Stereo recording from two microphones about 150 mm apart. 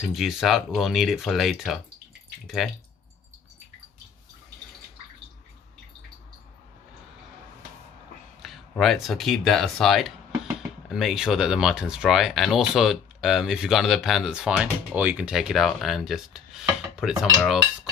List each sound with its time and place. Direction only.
0.1 s speech: centre (ahead or behind)
8.4 s speech: centre (ahead or behind)